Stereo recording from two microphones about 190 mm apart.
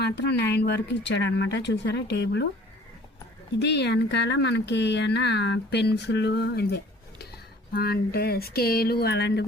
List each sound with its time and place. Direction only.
0.0 s speech: 60° left (ahead or behind)
3.6 s speech: 65° left (ahead or behind)